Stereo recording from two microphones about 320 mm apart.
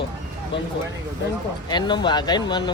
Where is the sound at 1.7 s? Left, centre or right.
Centre.